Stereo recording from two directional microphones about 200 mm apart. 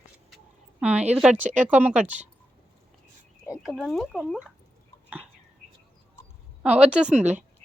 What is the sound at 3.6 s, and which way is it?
Speech, centre (ahead or behind).